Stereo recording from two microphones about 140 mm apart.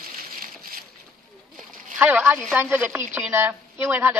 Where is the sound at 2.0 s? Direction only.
10° right (ahead or behind).